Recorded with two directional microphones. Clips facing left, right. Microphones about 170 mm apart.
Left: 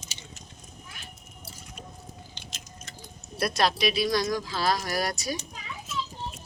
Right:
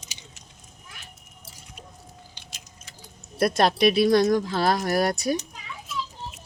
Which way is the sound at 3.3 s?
50° right (ahead or behind).